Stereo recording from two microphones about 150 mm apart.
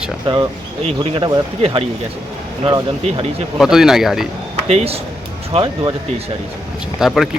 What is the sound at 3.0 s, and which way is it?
Speech, 40° right (ahead or behind).